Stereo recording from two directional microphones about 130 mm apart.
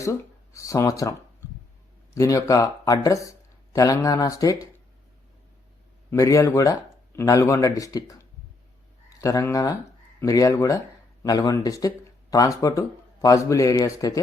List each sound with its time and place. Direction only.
0.0 s speech: 25° left (ahead or behind)
6.1 s speech: 25° left (ahead or behind)
9.1 s speech: 25° left (ahead or behind)